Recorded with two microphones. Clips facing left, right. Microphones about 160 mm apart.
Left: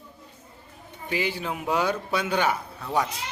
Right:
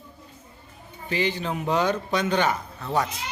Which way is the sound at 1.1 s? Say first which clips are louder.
Right 2 dB; 10° left (ahead or behind).